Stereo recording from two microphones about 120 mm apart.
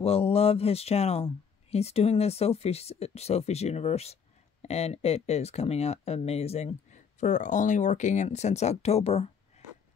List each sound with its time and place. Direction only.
0.0 s speech: 55° left (ahead or behind)